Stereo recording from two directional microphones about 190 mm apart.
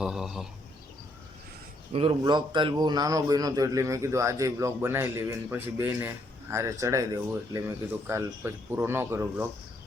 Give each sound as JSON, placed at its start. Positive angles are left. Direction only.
{"t": 0.0, "sound": "speech", "side_deg": -5}
{"t": 1.9, "sound": "a man's voice", "side_deg": -30}